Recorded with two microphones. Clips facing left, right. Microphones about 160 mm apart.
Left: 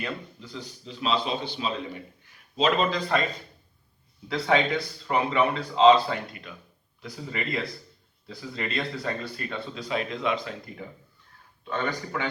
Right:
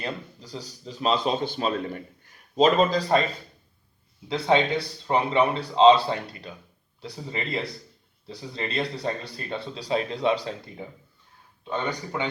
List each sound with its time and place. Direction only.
0.0 s speech: 35° right (ahead or behind)
4.3 s speech: 25° right (ahead or behind)
10.8 s speech: 20° right (ahead or behind)